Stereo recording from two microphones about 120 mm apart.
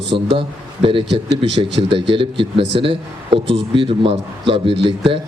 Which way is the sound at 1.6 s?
45° right (ahead or behind).